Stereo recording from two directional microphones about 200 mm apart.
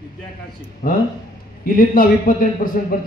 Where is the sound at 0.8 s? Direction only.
50° left (ahead or behind).